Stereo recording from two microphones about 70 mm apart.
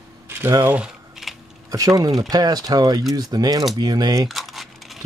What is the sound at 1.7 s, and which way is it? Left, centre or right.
Speech, right.